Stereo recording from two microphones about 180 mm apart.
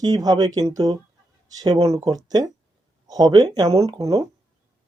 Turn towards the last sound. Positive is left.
turn(degrees=-15)  # may be behind; listen again after turning